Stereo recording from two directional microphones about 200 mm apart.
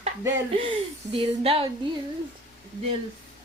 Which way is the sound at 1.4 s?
30° right (ahead or behind).